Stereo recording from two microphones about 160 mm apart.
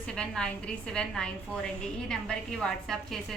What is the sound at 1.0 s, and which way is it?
Speech, 5° left (ahead or behind).